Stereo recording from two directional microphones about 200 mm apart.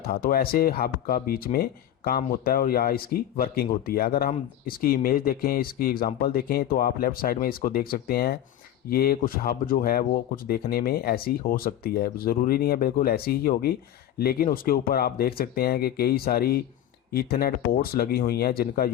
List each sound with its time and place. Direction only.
0.1 s speech: 50° left (ahead or behind)